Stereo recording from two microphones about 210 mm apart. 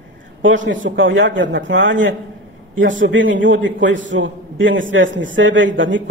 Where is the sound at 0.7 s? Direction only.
60° right (ahead or behind).